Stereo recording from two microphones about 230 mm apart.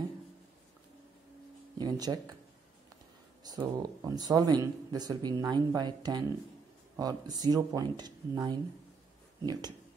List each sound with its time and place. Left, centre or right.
1.8 s speech: centre
3.4 s speech: centre